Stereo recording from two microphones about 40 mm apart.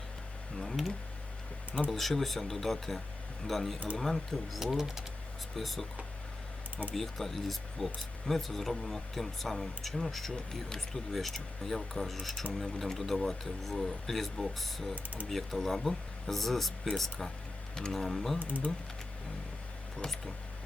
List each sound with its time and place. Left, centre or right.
0.6 s a sound: centre
1.9 s speech: centre
4.6 s speech: centre
6.9 s speech: centre
10.3 s speech: centre
14.9 s speech: right
15.3 s speech: centre
18.3 s speech: right